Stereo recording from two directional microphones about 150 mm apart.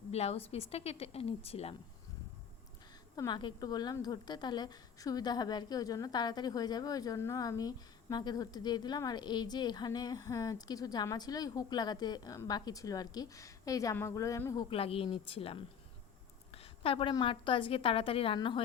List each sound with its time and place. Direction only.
0.1 s speech: 45° left (ahead or behind)
3.2 s a woman's voice: 30° left (ahead or behind)
14.7 s a woman's voice: 40° left (ahead or behind)